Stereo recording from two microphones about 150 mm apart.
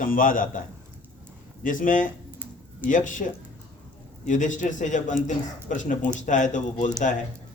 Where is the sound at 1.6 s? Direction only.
60° left (ahead or behind).